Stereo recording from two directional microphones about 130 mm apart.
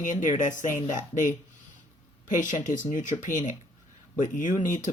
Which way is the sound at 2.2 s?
80° left.